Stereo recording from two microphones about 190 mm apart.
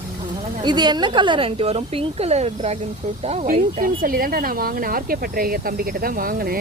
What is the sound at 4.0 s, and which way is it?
Speech, 50° right (ahead or behind).